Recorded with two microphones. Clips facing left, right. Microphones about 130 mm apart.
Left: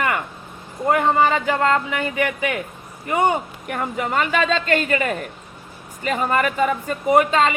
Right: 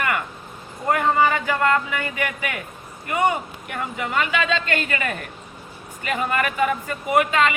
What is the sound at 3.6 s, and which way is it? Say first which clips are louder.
A woman's voice: left 4 dB; 40° left (ahead or behind).